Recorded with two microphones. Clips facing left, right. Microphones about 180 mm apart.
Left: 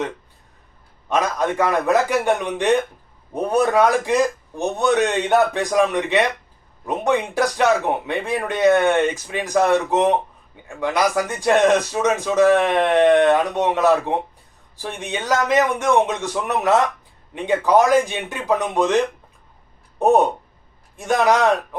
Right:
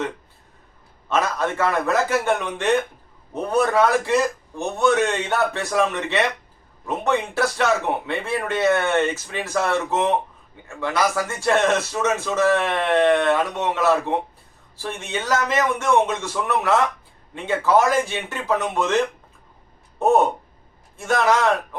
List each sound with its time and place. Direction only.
1.1 s speech: 15° left (ahead or behind)